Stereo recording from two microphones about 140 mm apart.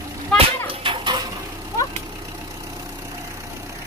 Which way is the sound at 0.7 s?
35° right (ahead or behind).